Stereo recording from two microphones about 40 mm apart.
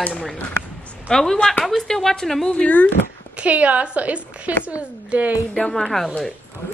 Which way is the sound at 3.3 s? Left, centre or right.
Right.